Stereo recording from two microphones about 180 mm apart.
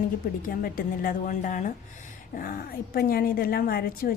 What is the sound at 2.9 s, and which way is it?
A woman's voice, 55° left (ahead or behind).